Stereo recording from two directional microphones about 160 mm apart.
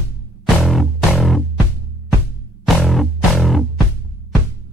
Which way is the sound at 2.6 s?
Centre (ahead or behind).